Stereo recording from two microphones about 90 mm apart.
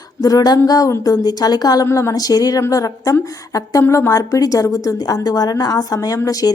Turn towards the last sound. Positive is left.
turn(degrees=40)  # may be behind; listen again after turning